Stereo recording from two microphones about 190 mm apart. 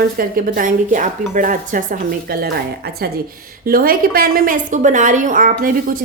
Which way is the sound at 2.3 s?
55° right (ahead or behind).